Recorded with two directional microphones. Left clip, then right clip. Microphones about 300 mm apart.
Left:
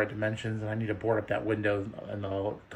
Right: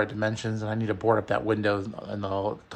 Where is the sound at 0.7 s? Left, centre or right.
Right.